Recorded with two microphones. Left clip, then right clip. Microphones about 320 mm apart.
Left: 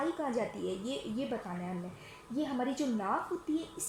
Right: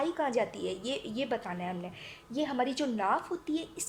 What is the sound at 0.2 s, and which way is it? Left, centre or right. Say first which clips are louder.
A woman's voice: right 4 dB; right.